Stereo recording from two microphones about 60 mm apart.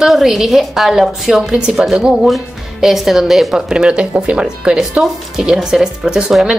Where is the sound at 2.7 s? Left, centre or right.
Centre.